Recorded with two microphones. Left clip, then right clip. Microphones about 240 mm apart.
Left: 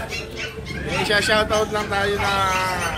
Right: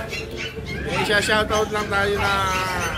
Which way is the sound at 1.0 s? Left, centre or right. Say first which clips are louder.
Left 1 dB; centre.